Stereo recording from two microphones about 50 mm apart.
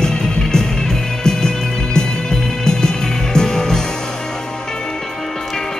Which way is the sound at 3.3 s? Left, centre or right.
Centre.